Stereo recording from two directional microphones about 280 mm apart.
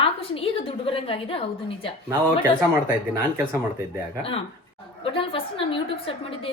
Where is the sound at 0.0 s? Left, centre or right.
Left.